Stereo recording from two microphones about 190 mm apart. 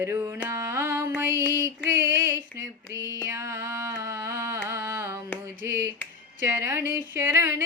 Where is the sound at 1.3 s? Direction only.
15° left (ahead or behind).